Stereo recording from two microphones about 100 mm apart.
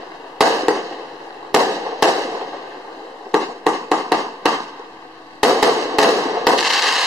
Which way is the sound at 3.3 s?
Centre (ahead or behind).